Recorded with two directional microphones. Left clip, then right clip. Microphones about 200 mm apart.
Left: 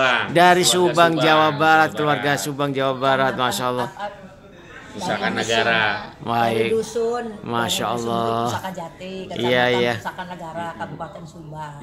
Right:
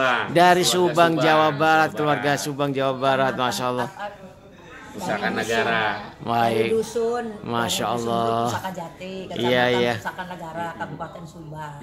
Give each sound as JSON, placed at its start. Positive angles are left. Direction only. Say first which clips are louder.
{"t": 0.0, "sound": "a sound", "louder": "left 3 dB", "side_deg": 15}
{"t": 0.3, "sound": "speech", "louder": "left 1 dB", "side_deg": 0}
{"t": 5.0, "sound": "a man's voice", "louder": "left 2 dB", "side_deg": 15}
{"t": 6.2, "sound": "speech", "louder": "left 1 dB", "side_deg": 0}